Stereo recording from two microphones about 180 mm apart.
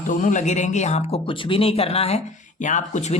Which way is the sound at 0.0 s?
45° left (ahead or behind).